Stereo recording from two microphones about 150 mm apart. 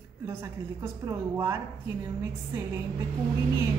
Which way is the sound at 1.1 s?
20° right (ahead or behind).